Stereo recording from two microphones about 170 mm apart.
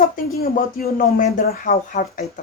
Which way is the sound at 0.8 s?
50° left (ahead or behind).